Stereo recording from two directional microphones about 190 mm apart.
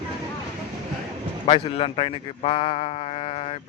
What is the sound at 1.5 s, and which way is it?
Speech, 30° left (ahead or behind).